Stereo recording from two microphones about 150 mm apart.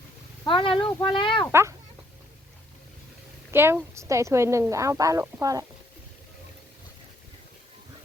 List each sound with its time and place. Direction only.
0.4 s speech: 35° left (ahead or behind)
3.5 s a woman's voice: 15° right (ahead or behind)